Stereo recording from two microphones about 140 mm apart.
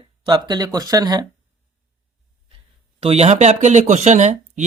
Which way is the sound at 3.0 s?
50° right (ahead or behind).